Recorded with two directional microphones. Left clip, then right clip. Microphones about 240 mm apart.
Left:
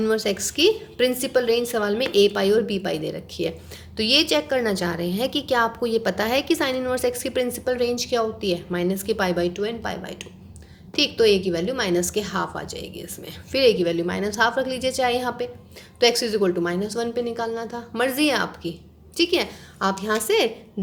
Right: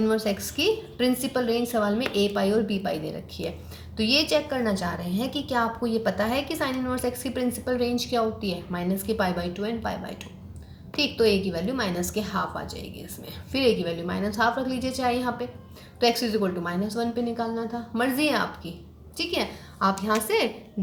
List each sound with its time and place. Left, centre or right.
0.0 s a woman's voice: left